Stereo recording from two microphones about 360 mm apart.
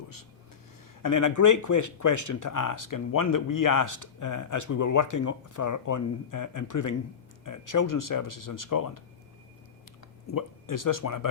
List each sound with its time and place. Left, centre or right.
1.0 s speech: left
10.3 s speech: left